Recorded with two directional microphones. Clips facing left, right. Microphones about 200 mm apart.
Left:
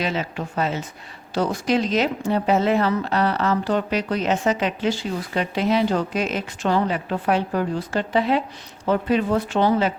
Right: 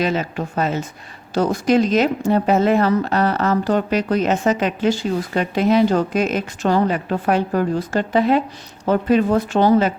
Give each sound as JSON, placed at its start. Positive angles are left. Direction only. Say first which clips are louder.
{"t": 0.0, "sound": "speech", "louder": "right 5 dB", "side_deg": -45}